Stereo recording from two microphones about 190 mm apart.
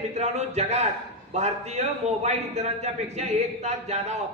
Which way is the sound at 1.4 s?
35° right (ahead or behind).